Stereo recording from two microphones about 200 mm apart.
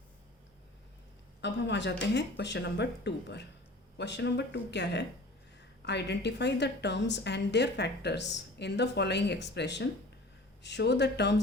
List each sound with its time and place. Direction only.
1.4 s a woman's voice: 60° left (ahead or behind)